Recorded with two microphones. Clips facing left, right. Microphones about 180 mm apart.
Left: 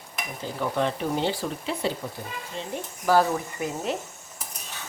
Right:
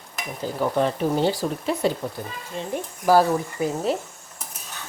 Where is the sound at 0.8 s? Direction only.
40° right (ahead or behind).